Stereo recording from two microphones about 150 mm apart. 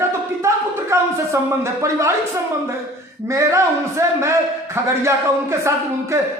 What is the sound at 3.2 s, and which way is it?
A man's voice, 20° right (ahead or behind).